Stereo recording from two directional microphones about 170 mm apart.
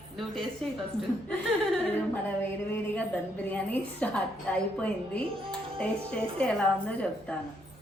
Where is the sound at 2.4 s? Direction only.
10° left (ahead or behind).